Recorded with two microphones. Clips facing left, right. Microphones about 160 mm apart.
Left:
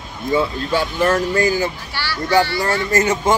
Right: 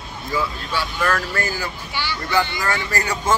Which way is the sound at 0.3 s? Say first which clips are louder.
Left 6 dB; 25° left (ahead or behind).